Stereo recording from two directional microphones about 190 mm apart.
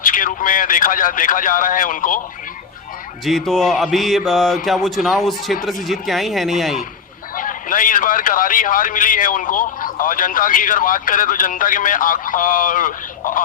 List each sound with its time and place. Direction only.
0.0 s a man's voice: 45° left (ahead or behind)
3.2 s speech: centre (ahead or behind)
7.3 s a man's voice: 45° left (ahead or behind)